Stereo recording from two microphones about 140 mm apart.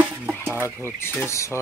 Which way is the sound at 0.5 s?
15° left (ahead or behind).